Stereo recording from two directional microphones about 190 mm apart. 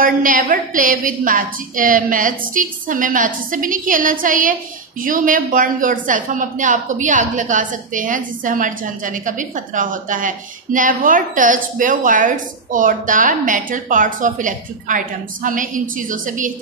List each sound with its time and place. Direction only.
0.0 s a woman's voice: 45° right (ahead or behind)